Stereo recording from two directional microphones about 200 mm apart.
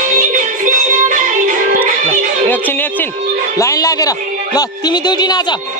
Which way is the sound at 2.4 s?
10° left (ahead or behind).